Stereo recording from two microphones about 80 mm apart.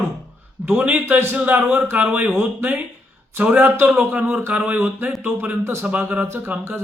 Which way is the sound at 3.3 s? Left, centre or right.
Centre.